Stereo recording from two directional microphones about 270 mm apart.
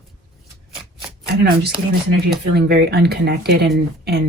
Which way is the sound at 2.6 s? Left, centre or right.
Right.